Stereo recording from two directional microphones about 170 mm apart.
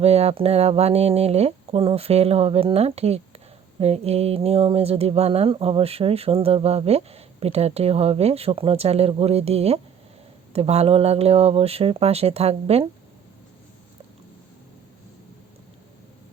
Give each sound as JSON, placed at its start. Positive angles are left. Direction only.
{"t": 0.0, "sound": "speech", "side_deg": -40}